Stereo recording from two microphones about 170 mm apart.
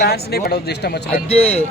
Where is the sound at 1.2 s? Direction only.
35° left (ahead or behind).